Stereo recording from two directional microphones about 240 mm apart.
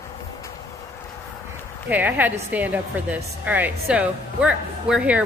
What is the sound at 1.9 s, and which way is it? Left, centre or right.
Speech, centre.